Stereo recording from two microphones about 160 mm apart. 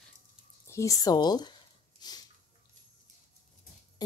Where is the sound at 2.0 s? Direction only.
25° left (ahead or behind).